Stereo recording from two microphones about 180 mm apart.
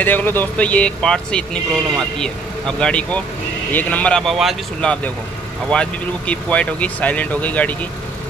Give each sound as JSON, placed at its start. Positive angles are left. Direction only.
{"t": 0.0, "sound": "speech", "side_deg": 10}